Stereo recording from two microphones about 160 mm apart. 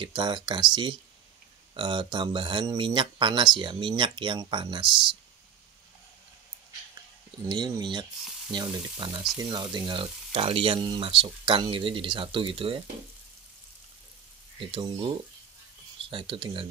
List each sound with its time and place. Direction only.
0.0 s speech: 30° right (ahead or behind)
1.8 s speech: 30° right (ahead or behind)
7.4 s speech: 25° right (ahead or behind)
14.6 s speech: 30° right (ahead or behind)